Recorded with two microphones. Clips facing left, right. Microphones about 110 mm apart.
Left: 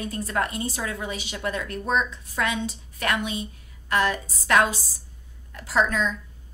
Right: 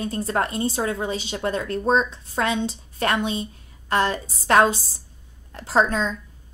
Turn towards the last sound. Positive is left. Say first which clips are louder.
# right 3 dB
turn(degrees=-30)  # may be behind; listen again after turning